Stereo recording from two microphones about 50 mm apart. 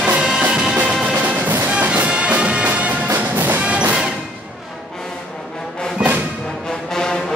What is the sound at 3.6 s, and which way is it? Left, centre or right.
Music, right.